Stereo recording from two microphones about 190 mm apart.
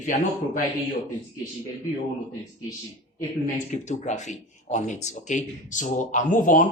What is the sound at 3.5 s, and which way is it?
Speech, 40° left (ahead or behind).